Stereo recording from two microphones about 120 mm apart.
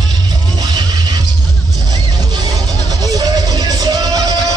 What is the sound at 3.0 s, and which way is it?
Music, 30° right (ahead or behind).